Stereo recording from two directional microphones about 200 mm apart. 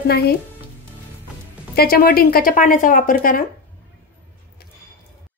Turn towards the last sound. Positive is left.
turn(degrees=45)  # may be behind; listen again after turning